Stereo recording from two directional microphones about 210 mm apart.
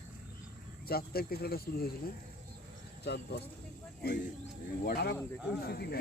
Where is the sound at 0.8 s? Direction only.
45° left (ahead or behind).